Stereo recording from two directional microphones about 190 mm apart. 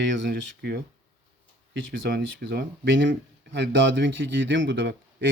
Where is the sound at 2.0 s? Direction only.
60° right (ahead or behind).